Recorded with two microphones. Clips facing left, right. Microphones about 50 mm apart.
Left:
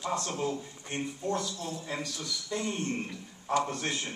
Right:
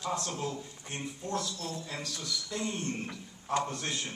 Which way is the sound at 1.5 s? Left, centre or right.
Left.